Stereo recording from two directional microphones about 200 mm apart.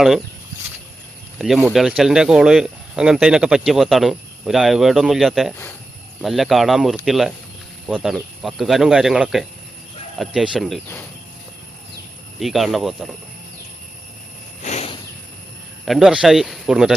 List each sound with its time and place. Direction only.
1.4 s speech: centre (ahead or behind)
12.4 s speech: centre (ahead or behind)
14.6 s a sound: 35° left (ahead or behind)
15.9 s speech: centre (ahead or behind)